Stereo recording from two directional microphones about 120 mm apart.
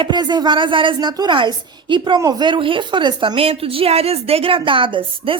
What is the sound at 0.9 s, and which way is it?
A woman's voice, 30° right (ahead or behind).